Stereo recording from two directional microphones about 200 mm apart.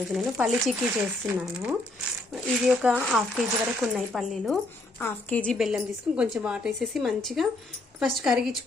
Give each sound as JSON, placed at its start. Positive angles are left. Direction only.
{"t": 0.0, "sound": "a woman's voice", "side_deg": -5}
{"t": 2.3, "sound": "a woman's voice", "side_deg": -5}
{"t": 4.9, "sound": "a woman's voice", "side_deg": 5}